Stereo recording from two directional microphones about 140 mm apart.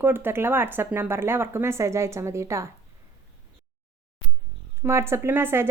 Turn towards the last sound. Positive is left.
turn(degrees=-15)  # may be behind; listen again after turning